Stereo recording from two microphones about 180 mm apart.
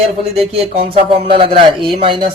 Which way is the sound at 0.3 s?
35° right (ahead or behind).